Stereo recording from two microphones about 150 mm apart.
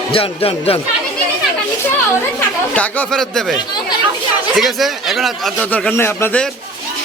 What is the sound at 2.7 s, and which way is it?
Speech, 5° left (ahead or behind).